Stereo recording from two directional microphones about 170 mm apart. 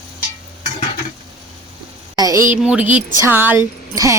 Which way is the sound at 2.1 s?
20° right (ahead or behind).